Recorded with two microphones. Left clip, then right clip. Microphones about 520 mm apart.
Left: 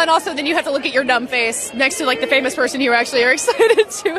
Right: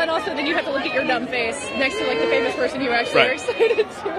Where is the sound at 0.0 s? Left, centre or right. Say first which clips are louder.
Left 6 dB; left.